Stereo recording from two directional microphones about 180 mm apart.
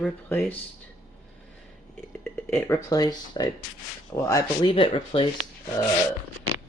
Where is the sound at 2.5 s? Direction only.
10° left (ahead or behind).